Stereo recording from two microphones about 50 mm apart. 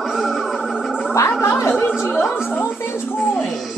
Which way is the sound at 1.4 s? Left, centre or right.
Left.